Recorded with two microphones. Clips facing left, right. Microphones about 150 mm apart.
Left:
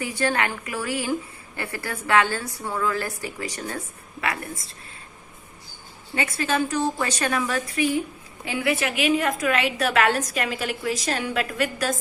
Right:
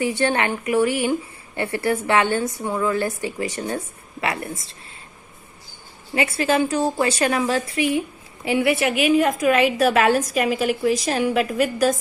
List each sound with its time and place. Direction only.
0.0 s a woman's voice: 25° right (ahead or behind)
6.2 s a woman's voice: 30° right (ahead or behind)